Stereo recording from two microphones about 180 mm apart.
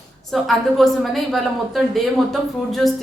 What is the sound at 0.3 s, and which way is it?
A woman's voice, centre (ahead or behind).